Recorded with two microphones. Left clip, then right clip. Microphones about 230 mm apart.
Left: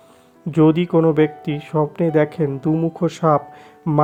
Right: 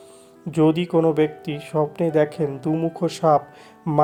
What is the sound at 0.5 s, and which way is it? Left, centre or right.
Speech, left.